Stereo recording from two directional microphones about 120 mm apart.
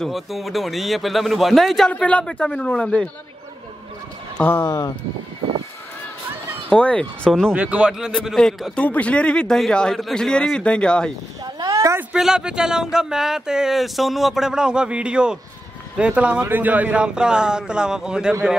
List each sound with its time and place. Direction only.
0.0 s speech: centre (ahead or behind)
4.4 s speech: 20° left (ahead or behind)
6.7 s a man's voice: 10° left (ahead or behind)
7.5 s speech: 10° right (ahead or behind)
8.7 s a man's voice: 10° left (ahead or behind)
11.4 s a sound: 30° right (ahead or behind)
12.0 s speech: 5° right (ahead or behind)